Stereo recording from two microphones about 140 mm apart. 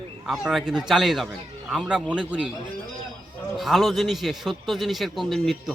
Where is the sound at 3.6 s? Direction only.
Centre (ahead or behind).